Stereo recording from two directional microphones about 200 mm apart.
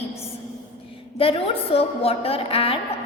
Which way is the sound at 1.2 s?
30° left (ahead or behind).